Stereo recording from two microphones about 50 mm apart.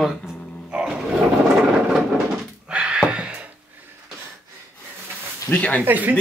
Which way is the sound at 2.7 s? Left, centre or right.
Centre.